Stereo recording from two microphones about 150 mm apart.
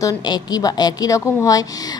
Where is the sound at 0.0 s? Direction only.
30° left (ahead or behind).